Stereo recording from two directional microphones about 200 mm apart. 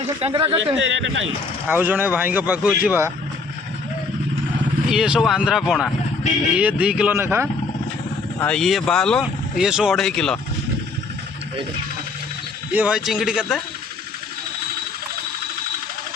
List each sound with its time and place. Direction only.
0.2 s a man's voice: 30° right (ahead or behind)
0.8 s a man's voice: 70° right (ahead or behind)
1.6 s speech: 10° right (ahead or behind)
4.9 s speech: centre (ahead or behind)
8.4 s speech: 5° left (ahead or behind)
12.7 s speech: 5° right (ahead or behind)